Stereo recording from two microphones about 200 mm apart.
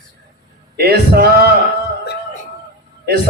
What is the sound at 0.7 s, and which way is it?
Speech, 50° right (ahead or behind).